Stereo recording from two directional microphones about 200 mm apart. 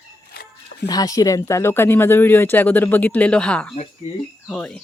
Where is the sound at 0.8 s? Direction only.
20° left (ahead or behind).